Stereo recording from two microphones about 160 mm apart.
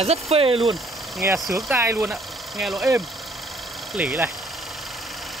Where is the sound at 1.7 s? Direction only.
15° right (ahead or behind).